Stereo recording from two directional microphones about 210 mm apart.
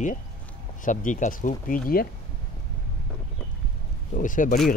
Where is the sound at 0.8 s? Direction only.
35° left (ahead or behind).